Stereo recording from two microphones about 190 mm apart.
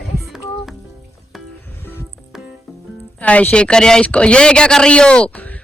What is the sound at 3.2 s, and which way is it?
Speech, 10° left (ahead or behind).